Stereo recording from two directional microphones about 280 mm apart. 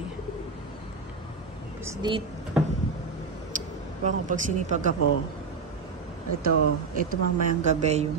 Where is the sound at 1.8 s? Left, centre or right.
Centre.